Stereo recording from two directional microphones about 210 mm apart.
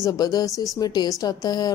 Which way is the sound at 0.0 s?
20° left (ahead or behind).